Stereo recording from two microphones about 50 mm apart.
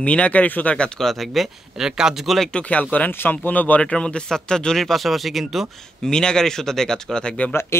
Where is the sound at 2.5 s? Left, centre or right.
Left.